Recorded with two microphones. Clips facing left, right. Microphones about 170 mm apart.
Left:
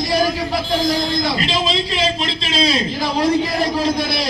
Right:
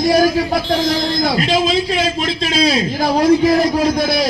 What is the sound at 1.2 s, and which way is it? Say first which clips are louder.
A man's voice: right 4 dB; 50° right (ahead or behind).